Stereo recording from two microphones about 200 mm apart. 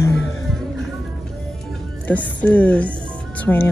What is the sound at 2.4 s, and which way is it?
Speech, 10° left (ahead or behind).